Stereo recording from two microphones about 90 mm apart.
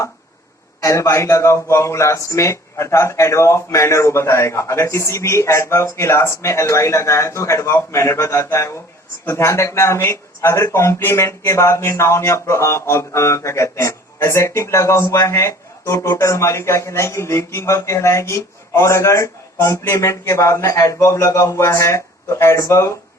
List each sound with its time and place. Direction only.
0.8 s speech: 35° left (ahead or behind)